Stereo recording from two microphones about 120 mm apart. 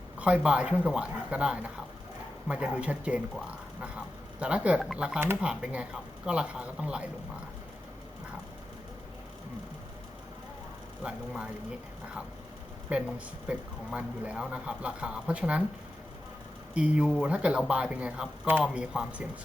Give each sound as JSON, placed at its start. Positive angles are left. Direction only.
{"t": 0.2, "sound": "speech", "side_deg": -10}
{"t": 12.9, "sound": "speech", "side_deg": -10}
{"t": 16.7, "sound": "speech", "side_deg": -10}